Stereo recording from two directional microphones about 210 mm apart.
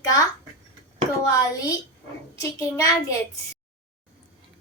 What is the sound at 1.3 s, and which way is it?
A child's voice, 15° left (ahead or behind).